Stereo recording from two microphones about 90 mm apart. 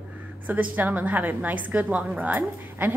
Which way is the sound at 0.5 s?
20° right (ahead or behind).